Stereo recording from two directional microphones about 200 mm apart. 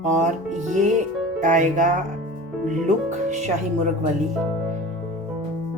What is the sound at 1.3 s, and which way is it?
Music, 40° right (ahead or behind).